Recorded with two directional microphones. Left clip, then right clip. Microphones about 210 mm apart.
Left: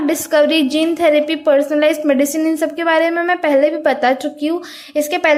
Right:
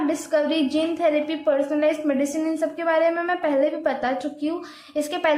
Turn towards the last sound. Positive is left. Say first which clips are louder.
# left 8 dB
turn(degrees=25)  # may be behind; listen again after turning